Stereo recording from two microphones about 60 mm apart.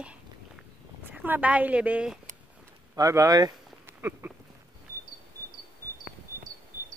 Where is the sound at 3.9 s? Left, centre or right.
Right.